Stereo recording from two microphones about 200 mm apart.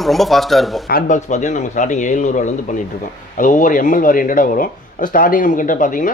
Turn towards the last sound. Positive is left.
turn(degrees=40)  # may be behind; listen again after turning